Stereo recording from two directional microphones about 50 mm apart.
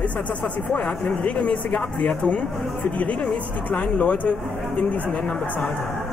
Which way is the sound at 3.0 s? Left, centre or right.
Left.